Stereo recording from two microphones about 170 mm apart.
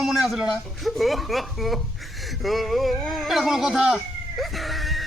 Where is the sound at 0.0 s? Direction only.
Centre (ahead or behind).